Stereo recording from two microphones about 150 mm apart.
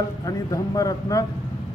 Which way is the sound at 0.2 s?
25° left (ahead or behind).